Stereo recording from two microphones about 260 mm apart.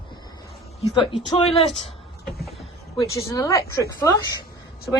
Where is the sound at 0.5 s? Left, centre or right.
Centre.